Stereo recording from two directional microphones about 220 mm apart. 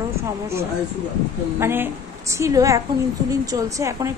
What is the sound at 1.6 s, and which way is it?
A woman's voice, 10° right (ahead or behind).